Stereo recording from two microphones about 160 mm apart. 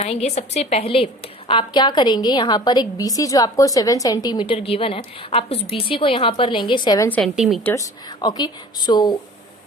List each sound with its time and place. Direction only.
0.0 s a woman's voice: 40° left (ahead or behind)
7.3 s a woman's voice: centre (ahead or behind)
7.6 s speech: 15° left (ahead or behind)
8.2 s a woman's voice: 25° left (ahead or behind)